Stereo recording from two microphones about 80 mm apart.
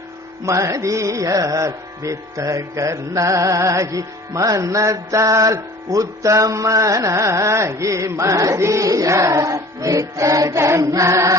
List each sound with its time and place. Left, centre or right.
0.4 s music: right